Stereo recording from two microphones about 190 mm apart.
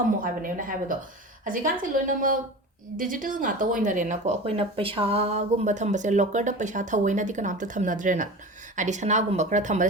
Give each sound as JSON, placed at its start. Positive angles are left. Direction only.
{"t": 0.4, "sound": "a woman's voice", "side_deg": -45}